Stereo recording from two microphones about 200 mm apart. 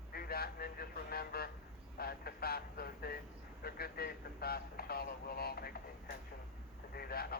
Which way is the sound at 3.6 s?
50° left (ahead or behind).